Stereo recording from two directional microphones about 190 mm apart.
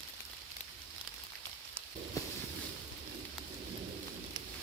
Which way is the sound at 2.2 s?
15° left (ahead or behind).